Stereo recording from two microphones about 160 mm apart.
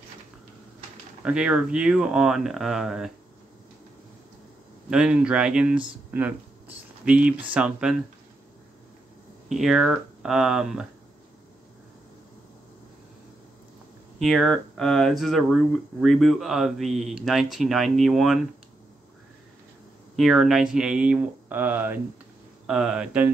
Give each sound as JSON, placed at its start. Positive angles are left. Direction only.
{"t": 1.2, "sound": "speech", "side_deg": -5}
{"t": 4.8, "sound": "speech", "side_deg": -5}
{"t": 9.5, "sound": "speech", "side_deg": 0}
{"t": 14.2, "sound": "speech", "side_deg": 0}
{"t": 20.2, "sound": "speech", "side_deg": 0}